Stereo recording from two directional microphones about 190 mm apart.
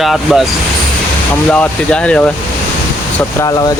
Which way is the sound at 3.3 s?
15° left (ahead or behind).